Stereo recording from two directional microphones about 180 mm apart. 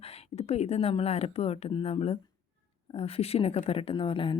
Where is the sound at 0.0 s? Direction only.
35° left (ahead or behind).